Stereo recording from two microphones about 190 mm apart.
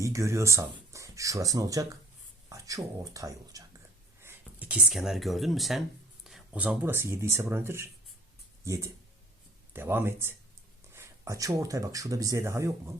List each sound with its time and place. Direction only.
0.0 s speech: 15° right (ahead or behind)